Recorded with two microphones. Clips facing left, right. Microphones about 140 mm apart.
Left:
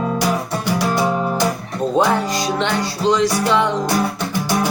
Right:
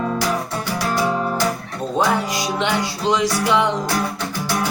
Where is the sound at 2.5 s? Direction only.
15° right (ahead or behind).